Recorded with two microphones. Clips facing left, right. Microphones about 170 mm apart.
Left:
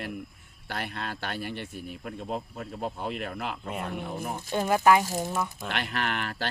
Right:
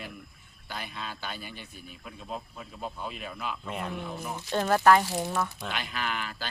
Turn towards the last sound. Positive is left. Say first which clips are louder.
# left 3 dB
turn(degrees=65)  # may be behind; listen again after turning